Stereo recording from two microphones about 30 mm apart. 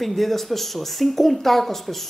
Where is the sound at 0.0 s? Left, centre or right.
Centre.